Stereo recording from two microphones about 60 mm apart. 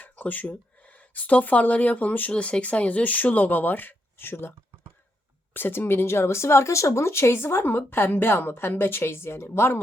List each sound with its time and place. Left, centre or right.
0.0 s speech: left
5.5 s speech: left